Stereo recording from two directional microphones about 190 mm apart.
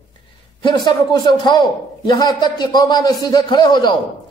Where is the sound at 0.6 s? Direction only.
25° left (ahead or behind).